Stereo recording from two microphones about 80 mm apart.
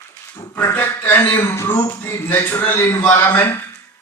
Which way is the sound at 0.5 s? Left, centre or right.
Left.